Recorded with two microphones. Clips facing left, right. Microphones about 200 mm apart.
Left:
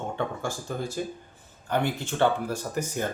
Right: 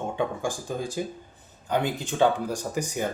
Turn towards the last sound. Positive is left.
turn(degrees=-15)  # may be behind; listen again after turning